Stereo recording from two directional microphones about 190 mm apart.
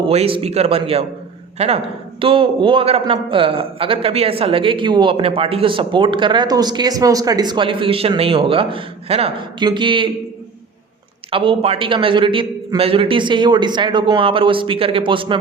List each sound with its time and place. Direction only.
0.0 s a man's voice: 30° right (ahead or behind)
11.3 s a man's voice: 30° right (ahead or behind)